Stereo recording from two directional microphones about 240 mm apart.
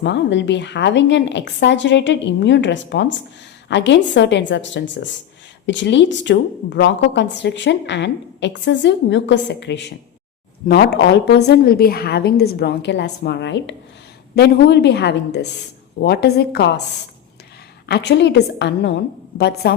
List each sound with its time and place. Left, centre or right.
0.0 s a woman's voice: left
17.8 s a woman's voice: left